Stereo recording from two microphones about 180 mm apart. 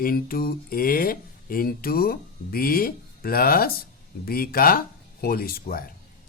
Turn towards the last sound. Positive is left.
turn(degrees=55)  # may be behind; listen again after turning